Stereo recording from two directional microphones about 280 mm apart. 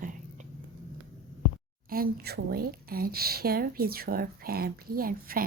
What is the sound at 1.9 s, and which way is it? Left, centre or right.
Speech, right.